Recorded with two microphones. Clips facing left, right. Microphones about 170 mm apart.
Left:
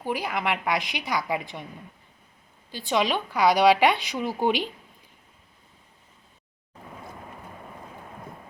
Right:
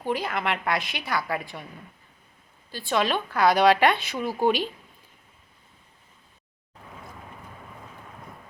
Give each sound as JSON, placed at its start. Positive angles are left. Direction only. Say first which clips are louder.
{"t": 0.0, "sound": "a woman's voice", "louder": "right 1 dB", "side_deg": 10}
{"t": 2.7, "sound": "a woman's voice", "louder": "even", "side_deg": 15}